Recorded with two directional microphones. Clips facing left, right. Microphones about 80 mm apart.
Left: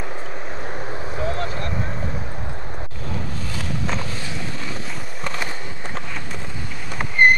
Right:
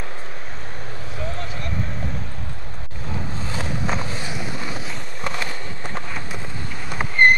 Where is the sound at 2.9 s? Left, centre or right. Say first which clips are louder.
Right 2 dB; right.